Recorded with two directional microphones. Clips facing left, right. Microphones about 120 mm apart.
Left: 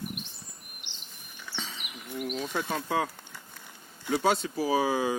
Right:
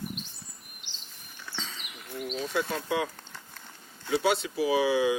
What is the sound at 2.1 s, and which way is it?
Bird, 15° left (ahead or behind).